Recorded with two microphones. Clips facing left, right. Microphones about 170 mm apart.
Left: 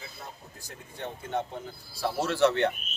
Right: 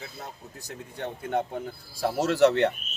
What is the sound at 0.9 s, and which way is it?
Speech, 55° right (ahead or behind).